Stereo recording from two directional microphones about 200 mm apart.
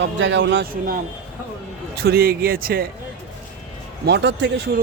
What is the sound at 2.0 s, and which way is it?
Speech, 50° right (ahead or behind).